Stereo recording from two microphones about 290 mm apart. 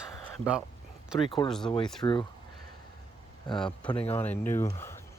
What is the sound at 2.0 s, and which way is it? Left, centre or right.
Speech, centre.